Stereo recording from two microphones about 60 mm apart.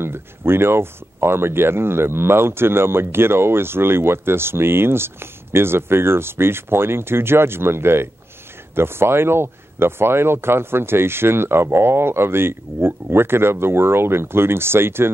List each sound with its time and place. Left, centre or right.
0.0 s speech: right